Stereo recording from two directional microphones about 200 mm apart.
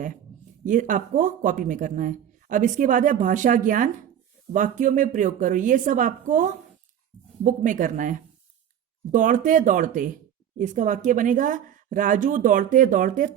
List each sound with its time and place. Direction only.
0.6 s speech: 40° right (ahead or behind)